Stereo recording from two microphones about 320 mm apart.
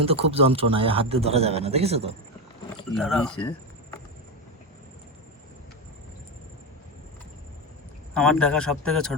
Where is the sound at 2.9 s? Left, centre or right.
Centre.